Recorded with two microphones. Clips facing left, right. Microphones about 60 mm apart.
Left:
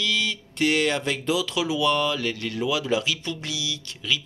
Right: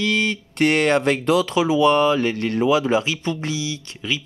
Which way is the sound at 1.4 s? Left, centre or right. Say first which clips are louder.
Right 7 dB; right.